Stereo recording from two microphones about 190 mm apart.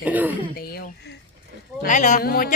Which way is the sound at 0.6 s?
55° left (ahead or behind).